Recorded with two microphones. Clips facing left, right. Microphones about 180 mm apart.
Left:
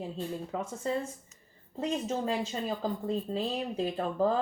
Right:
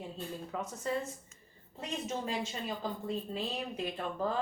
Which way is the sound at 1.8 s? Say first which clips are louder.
Left 6 dB; 35° left (ahead or behind).